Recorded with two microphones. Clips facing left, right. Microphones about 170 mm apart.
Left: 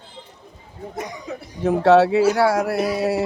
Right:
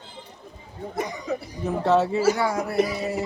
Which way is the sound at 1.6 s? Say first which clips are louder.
Left 7 dB; 80° left.